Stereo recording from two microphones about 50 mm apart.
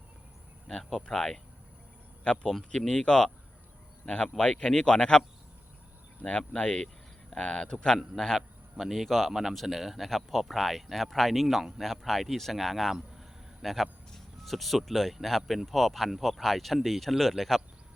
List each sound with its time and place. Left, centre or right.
0.7 s a man's voice: centre
6.5 s speech: centre
6.8 s a sound: centre
7.4 s a man's voice: centre
8.4 s speech: centre